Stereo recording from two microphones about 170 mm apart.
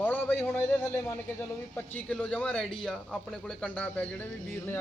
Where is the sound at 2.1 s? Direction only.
5° left (ahead or behind).